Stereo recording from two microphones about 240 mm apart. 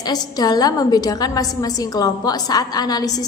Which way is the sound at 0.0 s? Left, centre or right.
Centre.